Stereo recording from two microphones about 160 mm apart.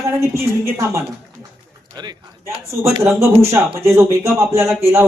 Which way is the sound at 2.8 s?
15° right (ahead or behind).